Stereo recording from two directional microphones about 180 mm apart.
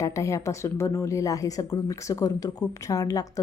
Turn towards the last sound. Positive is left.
turn(degrees=20)  # may be behind; listen again after turning